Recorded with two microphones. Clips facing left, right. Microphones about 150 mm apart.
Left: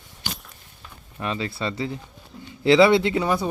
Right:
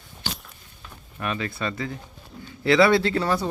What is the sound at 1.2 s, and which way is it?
Speech, 20° left (ahead or behind).